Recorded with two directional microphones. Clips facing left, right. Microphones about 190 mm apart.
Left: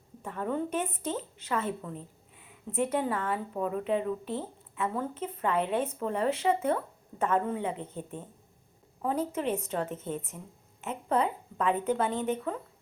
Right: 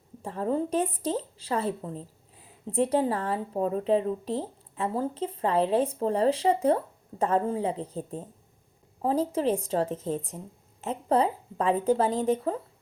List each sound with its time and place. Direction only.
0.2 s speech: 30° right (ahead or behind)